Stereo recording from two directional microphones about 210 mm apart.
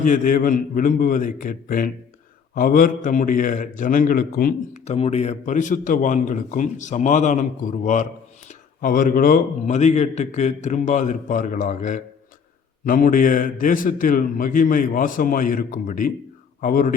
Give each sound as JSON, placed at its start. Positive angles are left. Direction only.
{"t": 0.0, "sound": "a man's voice", "side_deg": 40}
{"t": 8.4, "sound": "a man's voice", "side_deg": 40}